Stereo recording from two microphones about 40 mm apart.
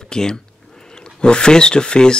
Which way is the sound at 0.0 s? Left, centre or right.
Centre.